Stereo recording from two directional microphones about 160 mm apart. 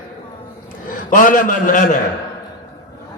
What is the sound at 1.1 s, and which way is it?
Speech, 55° left (ahead or behind).